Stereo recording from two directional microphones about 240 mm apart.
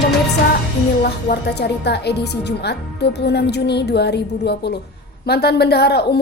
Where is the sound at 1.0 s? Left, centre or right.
Left.